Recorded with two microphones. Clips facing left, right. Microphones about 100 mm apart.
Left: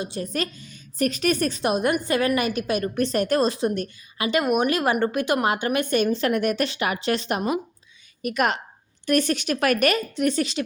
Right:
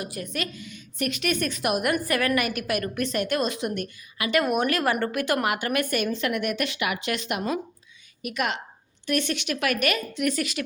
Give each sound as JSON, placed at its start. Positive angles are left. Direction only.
{"t": 0.0, "sound": "a woman's voice", "side_deg": 30}